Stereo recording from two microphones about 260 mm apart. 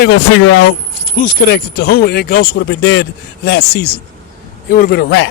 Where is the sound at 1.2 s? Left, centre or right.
Left.